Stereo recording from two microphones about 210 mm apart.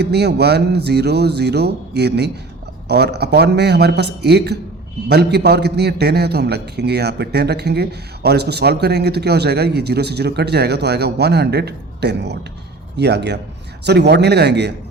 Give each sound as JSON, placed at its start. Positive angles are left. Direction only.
{"t": 0.0, "sound": "a man's voice", "side_deg": -50}